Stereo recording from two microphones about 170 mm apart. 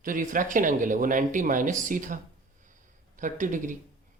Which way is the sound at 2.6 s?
50° right (ahead or behind).